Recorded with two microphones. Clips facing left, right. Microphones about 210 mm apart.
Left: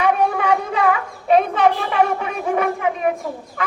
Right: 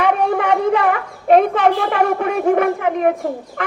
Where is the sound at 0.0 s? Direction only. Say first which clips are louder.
Right 2 dB; 60° right (ahead or behind).